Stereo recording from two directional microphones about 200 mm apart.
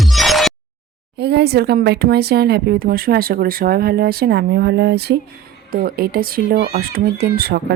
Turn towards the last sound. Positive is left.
turn(degrees=-50)  # may be behind; listen again after turning